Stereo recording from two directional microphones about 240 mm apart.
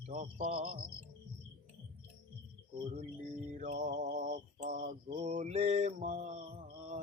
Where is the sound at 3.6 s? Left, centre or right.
Right.